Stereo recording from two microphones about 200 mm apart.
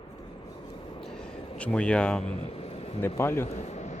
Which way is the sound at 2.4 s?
30° left (ahead or behind).